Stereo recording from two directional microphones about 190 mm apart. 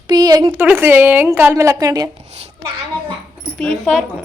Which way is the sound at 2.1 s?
35° right (ahead or behind).